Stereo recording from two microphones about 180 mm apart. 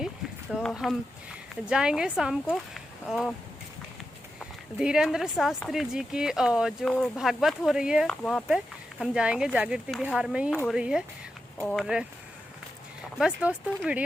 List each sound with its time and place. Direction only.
0.5 s speech: centre (ahead or behind)
4.4 s speech: 5° right (ahead or behind)
13.1 s speech: 5° right (ahead or behind)